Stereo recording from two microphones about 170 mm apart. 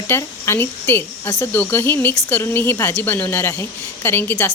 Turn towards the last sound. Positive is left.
turn(degrees=10)  # may be behind; listen again after turning